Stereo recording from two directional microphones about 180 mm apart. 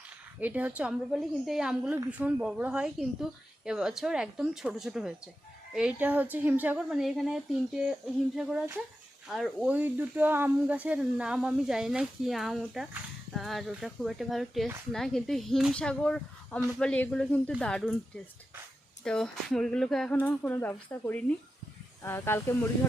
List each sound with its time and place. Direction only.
0.3 s speech: 10° right (ahead or behind)
19.0 s speech: 5° left (ahead or behind)